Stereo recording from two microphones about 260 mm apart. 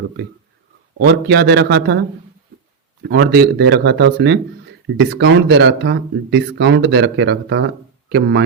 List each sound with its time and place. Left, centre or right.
0.9 s speech: right